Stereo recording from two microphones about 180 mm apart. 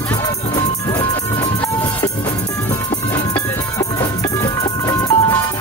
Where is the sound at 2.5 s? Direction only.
15° left (ahead or behind).